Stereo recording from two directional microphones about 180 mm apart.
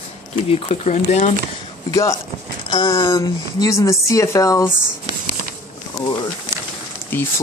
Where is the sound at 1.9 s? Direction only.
15° left (ahead or behind).